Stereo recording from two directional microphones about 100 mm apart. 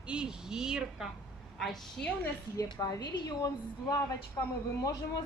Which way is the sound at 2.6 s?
50° left (ahead or behind).